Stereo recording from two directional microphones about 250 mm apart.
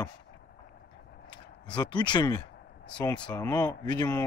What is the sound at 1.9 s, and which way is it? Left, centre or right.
Speech, centre.